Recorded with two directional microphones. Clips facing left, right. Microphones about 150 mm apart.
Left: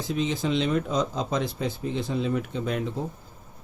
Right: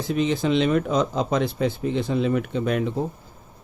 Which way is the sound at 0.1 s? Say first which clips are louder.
Right 5 dB; 65° right (ahead or behind).